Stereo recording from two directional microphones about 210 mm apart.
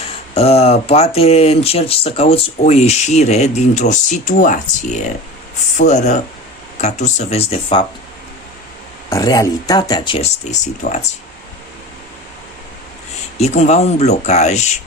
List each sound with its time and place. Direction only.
0.3 s speech: 30° left (ahead or behind)
9.0 s speech: 15° left (ahead or behind); by 11.0 s 35° left (ahead or behind)
13.4 s speech: 30° left (ahead or behind)